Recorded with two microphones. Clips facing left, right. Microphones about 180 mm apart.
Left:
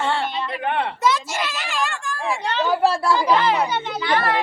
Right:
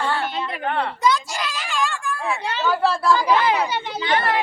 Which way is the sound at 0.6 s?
20° left (ahead or behind).